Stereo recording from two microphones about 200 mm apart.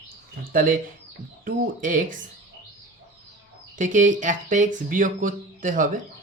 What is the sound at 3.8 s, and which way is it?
Speech, 40° right (ahead or behind).